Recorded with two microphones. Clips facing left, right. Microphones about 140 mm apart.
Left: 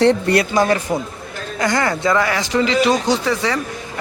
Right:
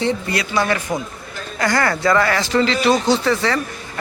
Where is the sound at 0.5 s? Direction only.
40° left (ahead or behind).